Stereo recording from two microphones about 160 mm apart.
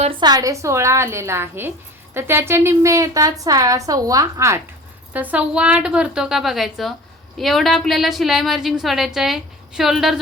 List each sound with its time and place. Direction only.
0.2 s a woman's voice: 25° right (ahead or behind); by 10.2 s centre (ahead or behind)